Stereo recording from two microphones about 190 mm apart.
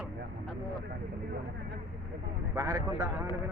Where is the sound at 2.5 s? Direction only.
15° right (ahead or behind).